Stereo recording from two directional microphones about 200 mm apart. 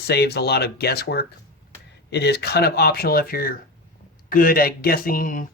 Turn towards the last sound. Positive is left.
turn(degrees=40)  # may be behind; listen again after turning